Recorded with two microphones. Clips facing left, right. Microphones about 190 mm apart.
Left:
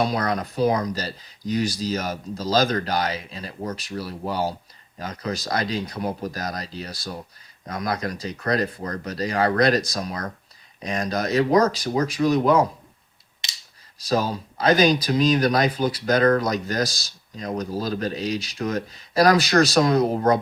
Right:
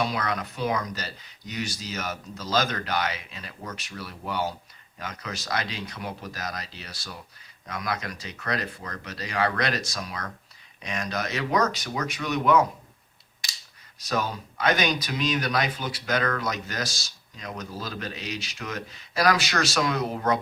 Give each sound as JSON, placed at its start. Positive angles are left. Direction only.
{"t": 0.0, "sound": "speech", "side_deg": 40}
{"t": 13.4, "sound": "a sound", "side_deg": 25}
{"t": 14.1, "sound": "speech", "side_deg": 35}